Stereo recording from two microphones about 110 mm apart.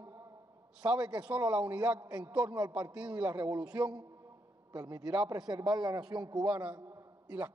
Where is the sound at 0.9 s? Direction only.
10° right (ahead or behind).